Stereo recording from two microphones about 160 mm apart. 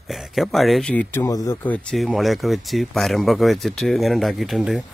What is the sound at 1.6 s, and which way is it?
Speech, 5° left (ahead or behind).